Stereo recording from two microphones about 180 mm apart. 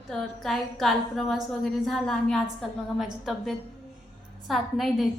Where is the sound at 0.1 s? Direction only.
Centre (ahead or behind).